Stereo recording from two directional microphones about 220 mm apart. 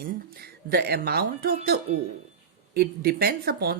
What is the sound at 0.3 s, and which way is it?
Speech, 45° right (ahead or behind).